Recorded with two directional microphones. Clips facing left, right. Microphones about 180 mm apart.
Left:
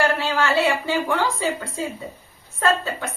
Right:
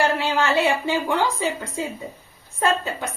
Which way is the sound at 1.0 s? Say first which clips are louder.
Even; 20° right (ahead or behind).